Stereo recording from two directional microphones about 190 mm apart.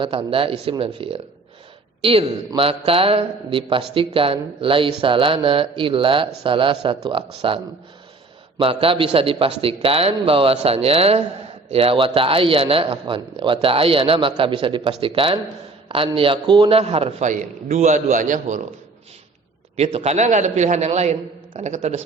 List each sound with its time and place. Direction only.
0.0 s a man's voice: 30° right (ahead or behind)
19.7 s a man's voice: 35° right (ahead or behind)